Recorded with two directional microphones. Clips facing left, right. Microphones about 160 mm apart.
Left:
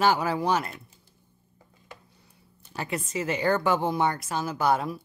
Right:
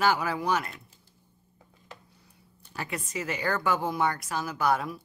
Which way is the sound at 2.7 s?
25° left (ahead or behind).